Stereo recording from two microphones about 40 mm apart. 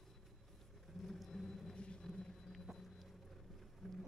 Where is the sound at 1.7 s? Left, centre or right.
Left.